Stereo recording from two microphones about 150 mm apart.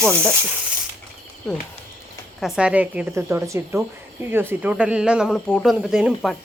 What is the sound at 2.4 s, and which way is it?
A woman's voice, 5° right (ahead or behind).